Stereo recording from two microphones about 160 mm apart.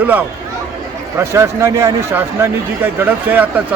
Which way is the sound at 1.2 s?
15° right (ahead or behind).